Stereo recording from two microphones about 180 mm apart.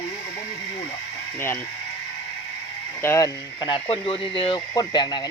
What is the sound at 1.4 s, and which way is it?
Speech, 10° left (ahead or behind).